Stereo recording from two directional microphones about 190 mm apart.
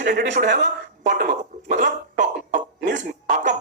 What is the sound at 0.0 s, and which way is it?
A man's voice, 50° right (ahead or behind).